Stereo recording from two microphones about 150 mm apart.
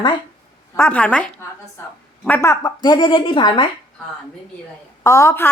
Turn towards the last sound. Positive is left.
turn(degrees=20)  # may be behind; listen again after turning